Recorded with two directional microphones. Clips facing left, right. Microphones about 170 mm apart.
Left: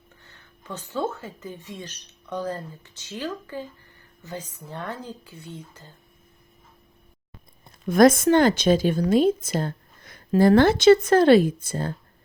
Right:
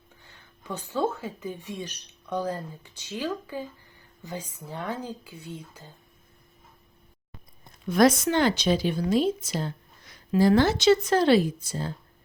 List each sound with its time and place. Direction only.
0.2 s speech: 10° right (ahead or behind)
7.9 s speech: 50° left (ahead or behind)